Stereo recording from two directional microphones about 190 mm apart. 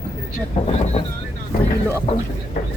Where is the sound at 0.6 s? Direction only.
35° left (ahead or behind).